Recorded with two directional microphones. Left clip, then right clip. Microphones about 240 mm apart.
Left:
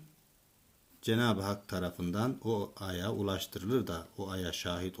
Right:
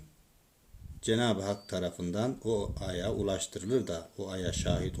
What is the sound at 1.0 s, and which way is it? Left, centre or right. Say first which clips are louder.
Speech: right 2 dB; centre.